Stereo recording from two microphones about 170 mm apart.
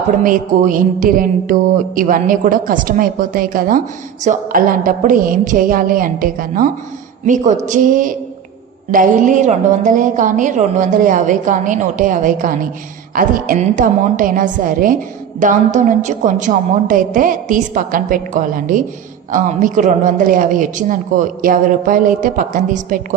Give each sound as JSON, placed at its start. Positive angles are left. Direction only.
{"t": 0.2, "sound": "a woman's voice", "side_deg": -50}
{"t": 7.3, "sound": "a woman's voice", "side_deg": -45}